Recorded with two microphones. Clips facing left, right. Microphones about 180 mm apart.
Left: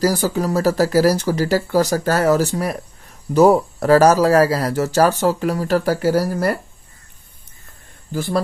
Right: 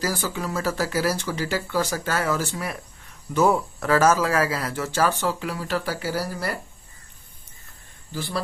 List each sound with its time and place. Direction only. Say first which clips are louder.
0.0 s speech: left 9 dB; 40° left (ahead or behind)
8.1 s speech: left 9 dB; 45° left (ahead or behind)